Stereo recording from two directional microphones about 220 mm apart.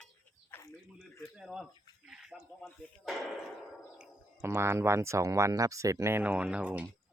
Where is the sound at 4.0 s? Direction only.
10° right (ahead or behind).